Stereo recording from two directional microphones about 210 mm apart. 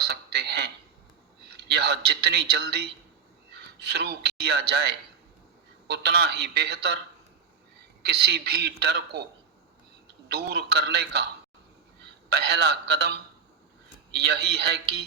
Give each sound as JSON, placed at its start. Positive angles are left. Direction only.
{"t": 0.0, "sound": "a sound", "side_deg": -50}
{"t": 1.5, "sound": "a man's voice", "side_deg": -50}
{"t": 8.0, "sound": "a man's voice", "side_deg": -50}
{"t": 10.3, "sound": "a man's voice", "side_deg": -50}
{"t": 12.3, "sound": "a man's voice", "side_deg": -50}
{"t": 14.3, "sound": "a man's voice", "side_deg": -50}